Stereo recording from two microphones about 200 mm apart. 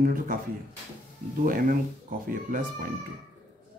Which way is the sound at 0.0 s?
45° right (ahead or behind).